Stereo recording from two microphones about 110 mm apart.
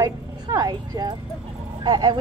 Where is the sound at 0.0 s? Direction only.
30° right (ahead or behind).